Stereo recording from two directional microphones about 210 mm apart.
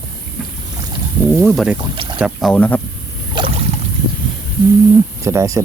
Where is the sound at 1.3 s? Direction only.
Centre (ahead or behind).